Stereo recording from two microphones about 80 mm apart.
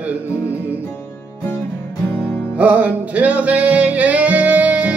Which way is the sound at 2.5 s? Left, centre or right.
Centre.